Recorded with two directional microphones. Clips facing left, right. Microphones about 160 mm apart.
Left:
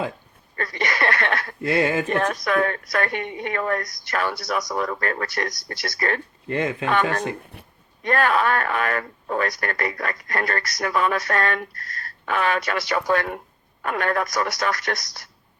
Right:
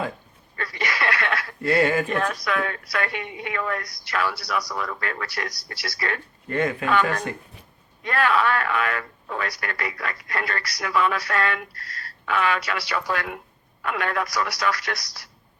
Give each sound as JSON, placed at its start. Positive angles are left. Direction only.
{"t": 0.5, "sound": "a sound", "side_deg": 45}
{"t": 1.6, "sound": "speech", "side_deg": 20}
{"t": 2.0, "sound": "speech", "side_deg": 45}
{"t": 6.5, "sound": "speech", "side_deg": 25}
{"t": 8.0, "sound": "speech", "side_deg": 45}